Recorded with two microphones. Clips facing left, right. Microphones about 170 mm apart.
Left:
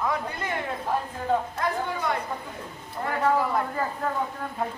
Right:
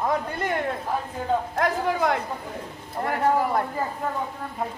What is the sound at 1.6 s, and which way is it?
Speech, 90° right.